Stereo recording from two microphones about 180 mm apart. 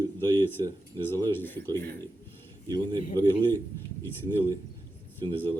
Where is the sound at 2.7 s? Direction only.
25° right (ahead or behind).